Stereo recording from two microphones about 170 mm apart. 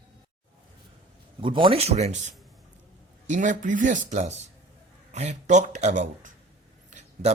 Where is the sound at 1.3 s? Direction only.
30° right (ahead or behind).